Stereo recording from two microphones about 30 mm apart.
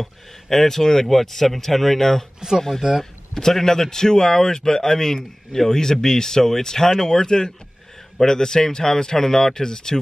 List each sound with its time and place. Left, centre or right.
0.0 s speech: centre